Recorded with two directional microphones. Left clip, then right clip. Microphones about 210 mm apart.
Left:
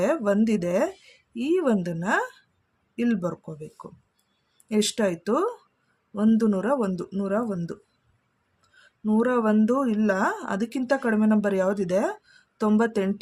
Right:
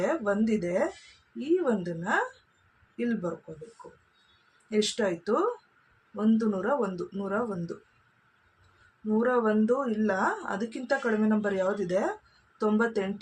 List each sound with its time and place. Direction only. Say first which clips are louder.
0.0 s speech: left 4 dB; 40° left (ahead or behind)
4.7 s speech: left 3 dB; 40° left (ahead or behind)
9.0 s speech: left 3 dB; 35° left (ahead or behind)